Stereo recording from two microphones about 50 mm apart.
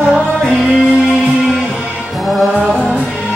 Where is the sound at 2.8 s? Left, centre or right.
Centre.